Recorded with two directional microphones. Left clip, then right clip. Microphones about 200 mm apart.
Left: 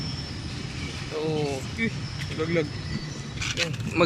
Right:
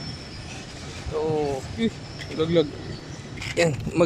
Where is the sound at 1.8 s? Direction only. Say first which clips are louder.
Right 1 dB; 15° right (ahead or behind).